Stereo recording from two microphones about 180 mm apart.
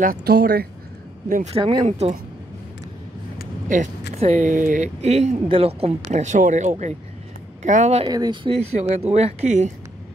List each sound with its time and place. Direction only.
0.0 s speech: 55° right (ahead or behind)
1.3 s speech: 35° right (ahead or behind)
1.9 s speech: 35° right (ahead or behind)
3.6 s speech: 45° right (ahead or behind)
8.1 s speech: 25° right (ahead or behind); by 9.7 s 40° right (ahead or behind)